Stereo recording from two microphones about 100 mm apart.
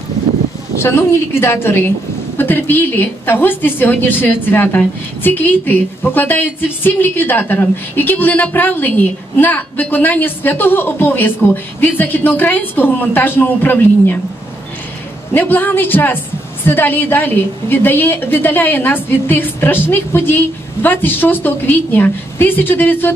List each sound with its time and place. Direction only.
0.7 s a woman's voice: 25° left (ahead or behind)
15.3 s a woman's voice: 20° left (ahead or behind)